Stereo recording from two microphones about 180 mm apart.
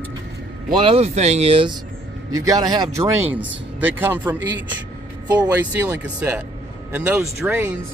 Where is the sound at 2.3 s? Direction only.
20° right (ahead or behind).